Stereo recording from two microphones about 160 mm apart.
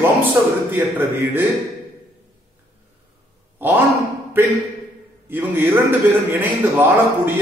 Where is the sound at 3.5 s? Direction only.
10° right (ahead or behind).